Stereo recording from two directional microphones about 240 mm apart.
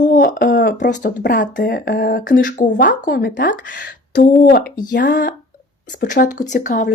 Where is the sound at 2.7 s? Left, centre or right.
Left.